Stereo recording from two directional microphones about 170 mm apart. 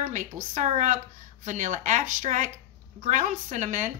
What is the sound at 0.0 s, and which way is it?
A woman's voice, 50° right (ahead or behind).